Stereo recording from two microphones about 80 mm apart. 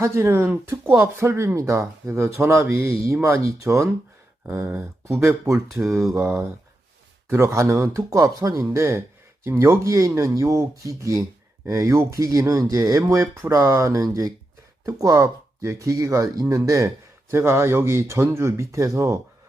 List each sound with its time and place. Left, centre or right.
0.0 s speech: right